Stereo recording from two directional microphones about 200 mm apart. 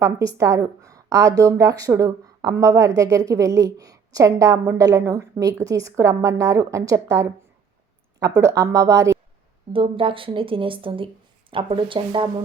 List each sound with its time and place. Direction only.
0.0 s a woman's voice: 15° right (ahead or behind)
9.7 s a woman's voice: 25° right (ahead or behind)